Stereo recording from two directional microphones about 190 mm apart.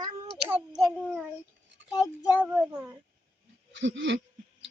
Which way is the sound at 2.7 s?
15° right (ahead or behind).